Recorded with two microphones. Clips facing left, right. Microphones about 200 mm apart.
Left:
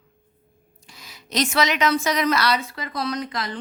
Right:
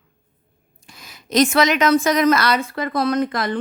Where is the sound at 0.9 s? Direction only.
50° right (ahead or behind).